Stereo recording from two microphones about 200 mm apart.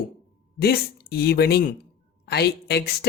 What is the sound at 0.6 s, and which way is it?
A woman's voice, 50° left (ahead or behind).